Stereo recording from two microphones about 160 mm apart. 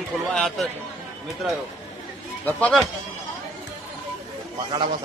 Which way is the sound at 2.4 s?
10° left (ahead or behind).